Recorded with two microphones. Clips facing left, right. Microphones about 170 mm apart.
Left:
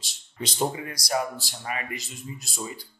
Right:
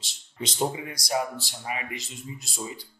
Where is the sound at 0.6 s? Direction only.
10° right (ahead or behind).